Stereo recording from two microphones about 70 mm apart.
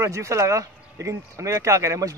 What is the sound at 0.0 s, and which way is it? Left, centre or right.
Speech, right.